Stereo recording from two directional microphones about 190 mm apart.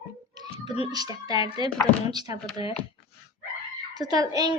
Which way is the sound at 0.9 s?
20° right (ahead or behind).